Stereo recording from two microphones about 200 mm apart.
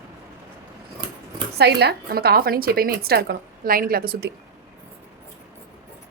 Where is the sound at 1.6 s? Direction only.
55° right (ahead or behind).